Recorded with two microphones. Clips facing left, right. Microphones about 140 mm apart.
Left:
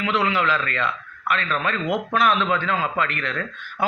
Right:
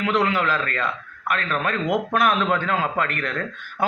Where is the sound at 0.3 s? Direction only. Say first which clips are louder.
Even; 45° right (ahead or behind).